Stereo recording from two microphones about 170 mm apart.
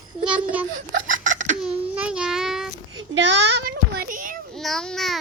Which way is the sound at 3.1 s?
90° right.